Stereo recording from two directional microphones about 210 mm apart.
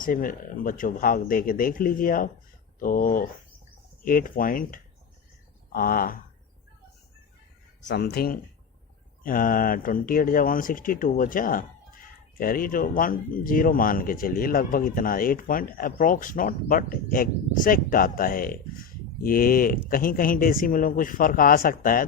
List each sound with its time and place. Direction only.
0.0 s speech: 40° left (ahead or behind)
7.9 s speech: 50° left (ahead or behind)